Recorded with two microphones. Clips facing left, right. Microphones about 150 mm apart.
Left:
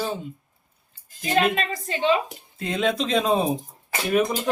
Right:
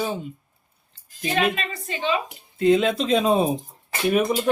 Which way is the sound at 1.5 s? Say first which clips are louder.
Left 3 dB; 35° left (ahead or behind).